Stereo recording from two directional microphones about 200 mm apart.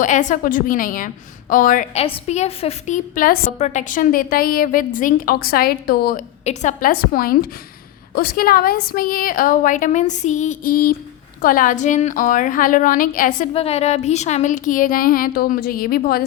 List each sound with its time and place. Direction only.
0.0 s a woman's voice: 40° left (ahead or behind)
6.4 s a woman's voice: 35° left (ahead or behind)
13.5 s speech: 30° left (ahead or behind); by 16.2 s 50° left (ahead or behind)